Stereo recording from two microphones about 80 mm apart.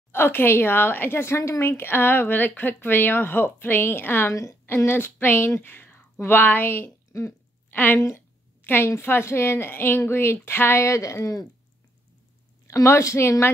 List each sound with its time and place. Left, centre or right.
0.1 s a woman's voice: left
4.3 s a woman's voice: left
4.6 s speech: left
7.7 s a woman's voice: left
12.6 s a woman's voice: left